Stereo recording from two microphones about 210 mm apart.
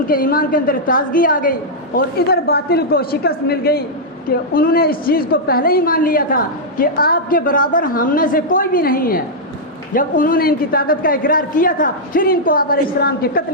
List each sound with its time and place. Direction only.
0.1 s a woman's voice: 45° left (ahead or behind)